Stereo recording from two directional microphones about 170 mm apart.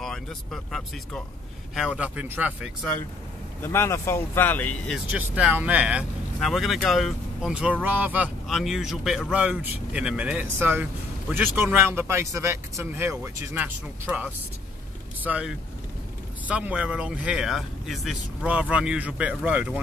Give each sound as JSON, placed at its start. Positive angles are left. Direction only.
{"t": 0.0, "sound": "speech", "side_deg": 0}
{"t": 3.6, "sound": "speech", "side_deg": 15}
{"t": 4.9, "sound": "speech", "side_deg": -10}